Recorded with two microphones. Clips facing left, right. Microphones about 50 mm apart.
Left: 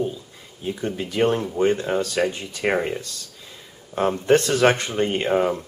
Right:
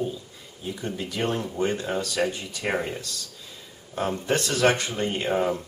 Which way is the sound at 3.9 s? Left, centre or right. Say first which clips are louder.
Left 6 dB; left.